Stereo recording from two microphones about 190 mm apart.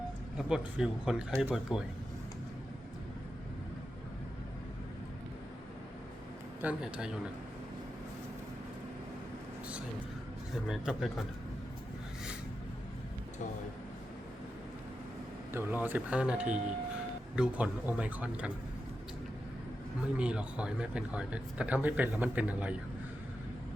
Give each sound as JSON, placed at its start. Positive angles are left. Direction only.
{"t": 0.3, "sound": "speech", "side_deg": -5}
{"t": 6.6, "sound": "speech", "side_deg": -5}
{"t": 10.7, "sound": "speech", "side_deg": 0}
{"t": 15.5, "sound": "speech", "side_deg": -10}
{"t": 20.1, "sound": "speech", "side_deg": -5}